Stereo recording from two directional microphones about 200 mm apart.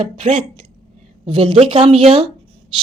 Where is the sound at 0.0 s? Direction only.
25° right (ahead or behind).